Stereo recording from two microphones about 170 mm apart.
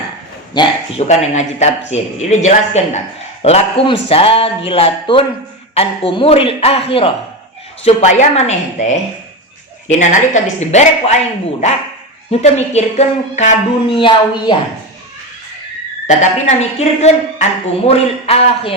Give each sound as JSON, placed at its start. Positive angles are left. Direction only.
{"t": 0.5, "sound": "a sound", "side_deg": 25}
{"t": 1.0, "sound": "a man's voice", "side_deg": 45}
{"t": 13.9, "sound": "speech", "side_deg": 30}
{"t": 16.0, "sound": "a man's voice", "side_deg": 45}